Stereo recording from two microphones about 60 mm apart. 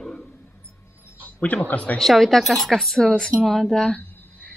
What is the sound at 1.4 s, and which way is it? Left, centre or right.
Speech, left.